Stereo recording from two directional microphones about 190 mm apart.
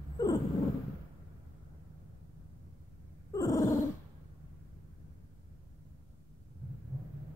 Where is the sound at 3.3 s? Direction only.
20° left (ahead or behind).